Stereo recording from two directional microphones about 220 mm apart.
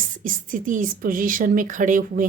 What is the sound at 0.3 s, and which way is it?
Speech, 35° right (ahead or behind).